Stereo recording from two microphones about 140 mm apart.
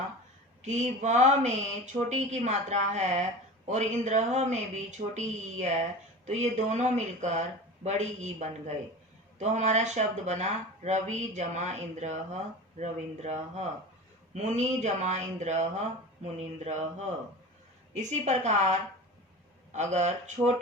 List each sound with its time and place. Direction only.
0.6 s speech: 55° right (ahead or behind)